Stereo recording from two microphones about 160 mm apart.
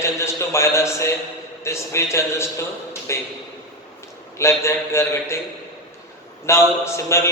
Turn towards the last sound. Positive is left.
turn(degrees=15)  # may be behind; listen again after turning